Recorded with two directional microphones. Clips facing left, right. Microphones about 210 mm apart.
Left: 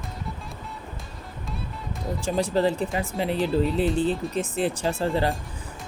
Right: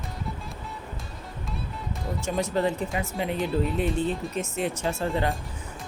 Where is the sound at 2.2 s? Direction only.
30° left (ahead or behind).